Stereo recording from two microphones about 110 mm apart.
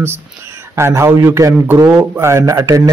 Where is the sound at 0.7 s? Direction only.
25° right (ahead or behind).